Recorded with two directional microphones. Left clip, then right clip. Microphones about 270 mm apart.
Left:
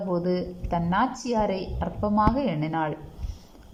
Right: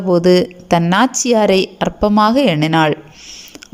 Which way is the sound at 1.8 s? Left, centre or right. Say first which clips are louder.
Right 13 dB; right.